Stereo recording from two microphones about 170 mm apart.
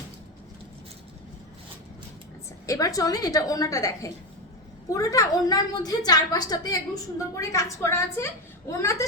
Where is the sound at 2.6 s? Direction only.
20° left (ahead or behind).